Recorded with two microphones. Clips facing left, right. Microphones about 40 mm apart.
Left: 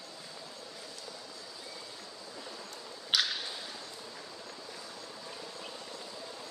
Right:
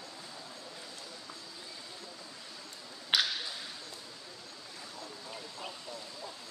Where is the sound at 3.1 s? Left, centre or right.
Centre.